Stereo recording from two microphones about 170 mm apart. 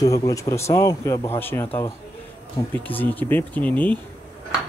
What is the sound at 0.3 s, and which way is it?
Speech, 20° left (ahead or behind).